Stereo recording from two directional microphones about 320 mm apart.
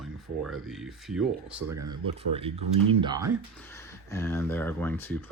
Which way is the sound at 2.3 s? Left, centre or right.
Centre.